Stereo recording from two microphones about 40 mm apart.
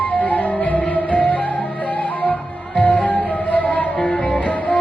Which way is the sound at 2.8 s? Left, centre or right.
Left.